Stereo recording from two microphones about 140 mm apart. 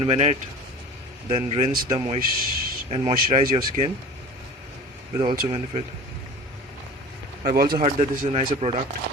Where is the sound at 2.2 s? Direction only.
90° right.